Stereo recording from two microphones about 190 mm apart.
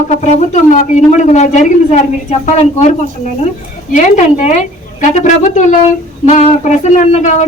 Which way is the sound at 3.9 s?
40° left (ahead or behind).